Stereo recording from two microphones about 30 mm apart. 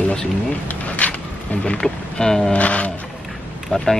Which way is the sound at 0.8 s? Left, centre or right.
Left.